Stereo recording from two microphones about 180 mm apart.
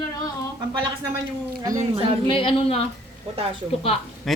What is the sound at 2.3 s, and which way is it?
Speech, 30° left (ahead or behind).